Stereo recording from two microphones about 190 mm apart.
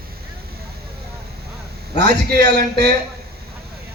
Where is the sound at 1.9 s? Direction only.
60° right (ahead or behind).